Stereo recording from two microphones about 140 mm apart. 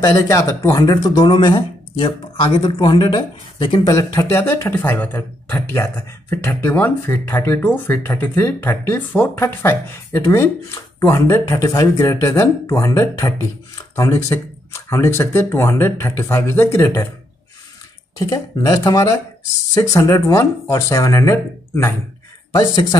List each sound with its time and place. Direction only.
0.0 s speech: 20° left (ahead or behind)
18.1 s speech: 25° left (ahead or behind)